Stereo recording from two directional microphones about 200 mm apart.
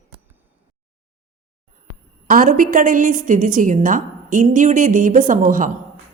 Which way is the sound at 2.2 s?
45° right (ahead or behind).